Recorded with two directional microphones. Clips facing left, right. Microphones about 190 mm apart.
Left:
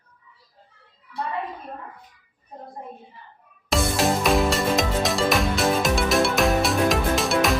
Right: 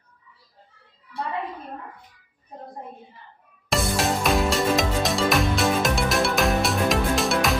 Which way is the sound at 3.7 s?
Centre (ahead or behind).